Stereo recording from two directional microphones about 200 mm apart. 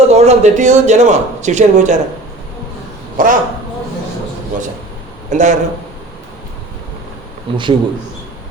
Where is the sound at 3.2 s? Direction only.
45° right (ahead or behind).